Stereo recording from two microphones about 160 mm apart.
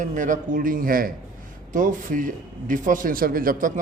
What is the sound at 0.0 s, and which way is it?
Speech, 55° right (ahead or behind).